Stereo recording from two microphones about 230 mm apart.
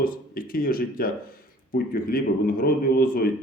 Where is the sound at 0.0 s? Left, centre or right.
Left.